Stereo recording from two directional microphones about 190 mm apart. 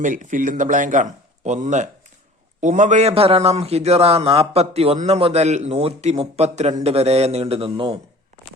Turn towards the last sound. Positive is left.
turn(degrees=-25)  # may be behind; listen again after turning